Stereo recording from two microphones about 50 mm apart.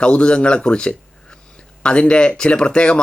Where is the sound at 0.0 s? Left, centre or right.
Centre.